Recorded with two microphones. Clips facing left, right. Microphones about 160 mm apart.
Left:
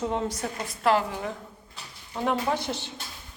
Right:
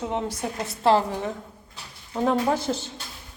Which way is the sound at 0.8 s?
30° right (ahead or behind).